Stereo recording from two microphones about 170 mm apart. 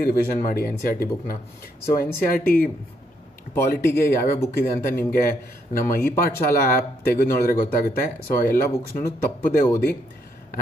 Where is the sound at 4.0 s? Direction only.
60° left (ahead or behind).